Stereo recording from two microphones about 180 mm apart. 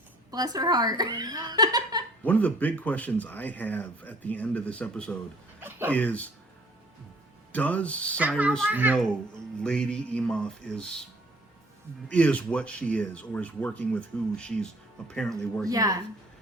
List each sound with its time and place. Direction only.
0.3 s speech: 20° right (ahead or behind)
2.2 s speech: 10° left (ahead or behind)
5.5 s a sound: 10° right (ahead or behind)
5.9 s speech: 10° left (ahead or behind)
7.5 s speech: 10° left (ahead or behind)
8.7 s a child's voice: 10° right (ahead or behind)
9.0 s speech: 5° left (ahead or behind)
12.0 s speech: 5° left (ahead or behind)
15.6 s a woman's voice: 20° right (ahead or behind)